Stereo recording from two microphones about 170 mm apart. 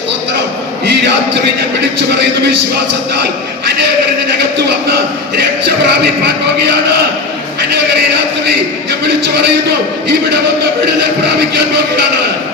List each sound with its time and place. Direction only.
5.6 s music: 80° right